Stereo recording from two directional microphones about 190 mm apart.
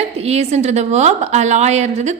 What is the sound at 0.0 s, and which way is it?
A woman's voice, 35° right (ahead or behind).